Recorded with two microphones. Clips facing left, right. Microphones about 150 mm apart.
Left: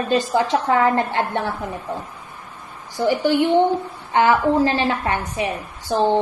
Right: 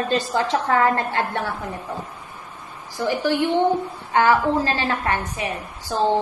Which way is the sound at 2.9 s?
20° left (ahead or behind).